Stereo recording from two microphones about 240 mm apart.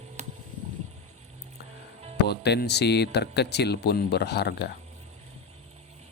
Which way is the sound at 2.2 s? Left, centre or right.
Left.